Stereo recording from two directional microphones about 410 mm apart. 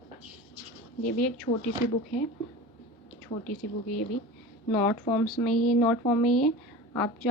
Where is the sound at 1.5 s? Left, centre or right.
Centre.